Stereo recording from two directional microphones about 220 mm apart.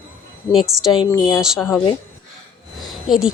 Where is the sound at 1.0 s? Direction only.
15° left (ahead or behind).